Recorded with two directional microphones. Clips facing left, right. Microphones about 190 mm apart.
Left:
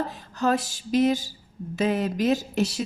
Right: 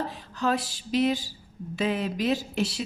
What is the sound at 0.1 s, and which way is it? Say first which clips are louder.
A woman's voice: left 3 dB; 45° left (ahead or behind).